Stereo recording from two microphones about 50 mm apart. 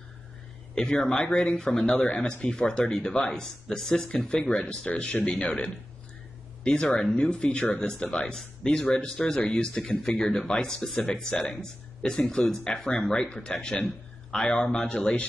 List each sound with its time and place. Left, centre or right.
0.7 s a man's voice: centre